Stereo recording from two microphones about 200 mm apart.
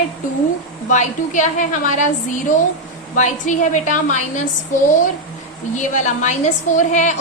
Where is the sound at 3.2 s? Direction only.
40° left (ahead or behind).